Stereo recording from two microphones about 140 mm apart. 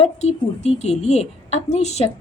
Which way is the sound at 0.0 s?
50° left (ahead or behind).